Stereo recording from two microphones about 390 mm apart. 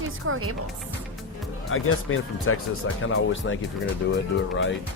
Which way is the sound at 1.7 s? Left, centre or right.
Left.